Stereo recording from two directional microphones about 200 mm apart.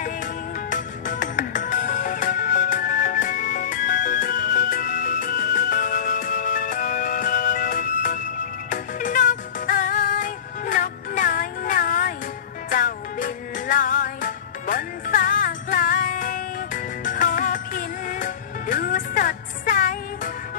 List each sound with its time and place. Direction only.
0.7 s music: 40° left (ahead or behind)